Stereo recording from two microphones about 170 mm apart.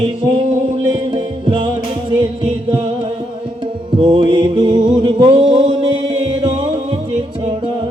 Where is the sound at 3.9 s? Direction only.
30° right (ahead or behind).